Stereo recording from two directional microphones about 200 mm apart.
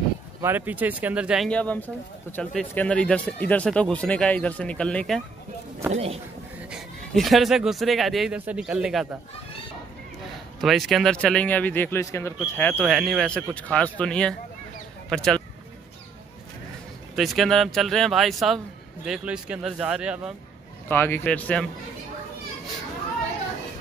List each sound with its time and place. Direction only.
0.4 s speech: 10° right (ahead or behind)
5.9 s speech: 30° right (ahead or behind)
6.7 s speech: centre (ahead or behind)
10.6 s speech: centre (ahead or behind)
17.1 s speech: centre (ahead or behind)
20.9 s speech: 10° left (ahead or behind)